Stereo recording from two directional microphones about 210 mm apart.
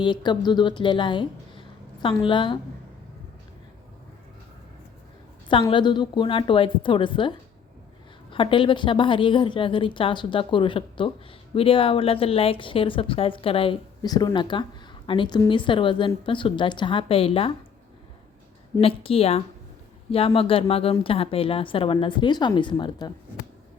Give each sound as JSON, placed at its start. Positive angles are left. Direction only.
{"t": 0.0, "sound": "a woman's voice", "side_deg": 20}
{"t": 5.5, "sound": "speech", "side_deg": 25}
{"t": 18.8, "sound": "speech", "side_deg": 25}